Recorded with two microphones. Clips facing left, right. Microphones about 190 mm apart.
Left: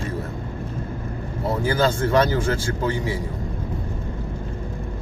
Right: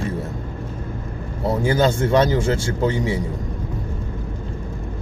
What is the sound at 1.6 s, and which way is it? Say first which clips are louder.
Speech: right 2 dB; 25° right (ahead or behind).